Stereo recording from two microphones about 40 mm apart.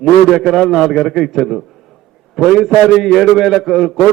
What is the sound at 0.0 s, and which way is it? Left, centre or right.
A man's voice, centre.